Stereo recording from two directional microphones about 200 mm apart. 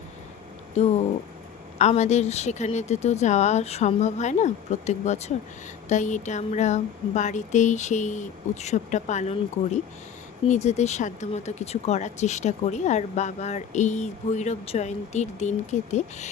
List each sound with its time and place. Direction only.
0.7 s speech: 35° left (ahead or behind)